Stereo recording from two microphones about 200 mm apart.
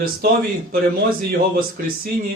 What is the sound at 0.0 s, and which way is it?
Speech, 50° right (ahead or behind).